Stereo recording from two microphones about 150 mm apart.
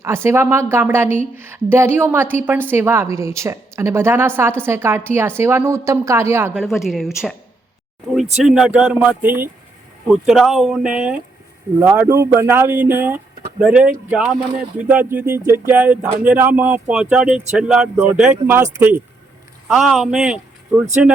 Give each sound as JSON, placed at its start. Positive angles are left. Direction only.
{"t": 0.0, "sound": "speech", "side_deg": -15}
{"t": 6.6, "sound": "speech", "side_deg": 0}
{"t": 10.1, "sound": "speech", "side_deg": 0}
{"t": 19.6, "sound": "speech", "side_deg": -5}